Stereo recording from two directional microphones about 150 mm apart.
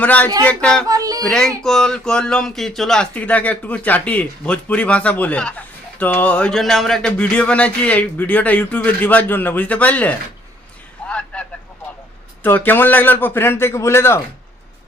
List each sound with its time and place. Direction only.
0.0 s speech: 10° left (ahead or behind)
0.9 s music: 25° right (ahead or behind)
1.2 s speech: 5° left (ahead or behind)
11.1 s a sound: 10° left (ahead or behind)
12.4 s speech: 10° left (ahead or behind)